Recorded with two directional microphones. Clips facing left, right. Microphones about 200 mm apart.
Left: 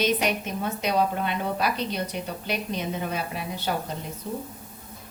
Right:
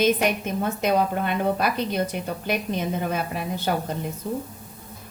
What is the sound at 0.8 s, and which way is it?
A woman's voice, 50° right (ahead or behind).